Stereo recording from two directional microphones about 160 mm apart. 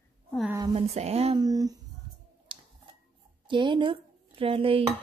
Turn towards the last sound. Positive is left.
turn(degrees=-35)  # may be behind; listen again after turning